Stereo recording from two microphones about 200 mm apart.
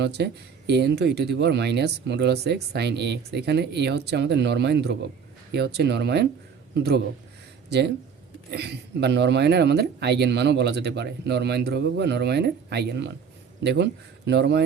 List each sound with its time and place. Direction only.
0.0 s a man's voice: 55° right (ahead or behind)
8.4 s speech: 55° right (ahead or behind)